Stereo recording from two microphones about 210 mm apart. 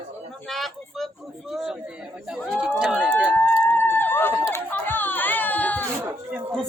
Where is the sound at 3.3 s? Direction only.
10° left (ahead or behind).